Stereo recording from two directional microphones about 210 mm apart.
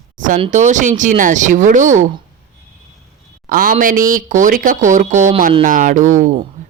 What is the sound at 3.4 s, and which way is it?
Speech, 40° right (ahead or behind).